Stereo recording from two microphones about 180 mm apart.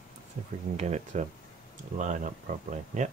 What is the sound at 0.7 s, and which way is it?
Speech, 40° right (ahead or behind).